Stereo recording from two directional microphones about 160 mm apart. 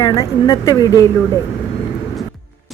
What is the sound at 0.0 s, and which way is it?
Speech, 20° left (ahead or behind).